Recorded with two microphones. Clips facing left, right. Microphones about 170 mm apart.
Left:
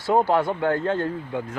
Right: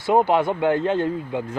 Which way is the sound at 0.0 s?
20° right (ahead or behind).